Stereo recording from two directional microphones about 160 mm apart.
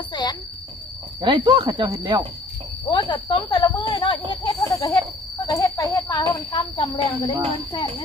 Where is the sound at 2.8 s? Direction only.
30° left (ahead or behind).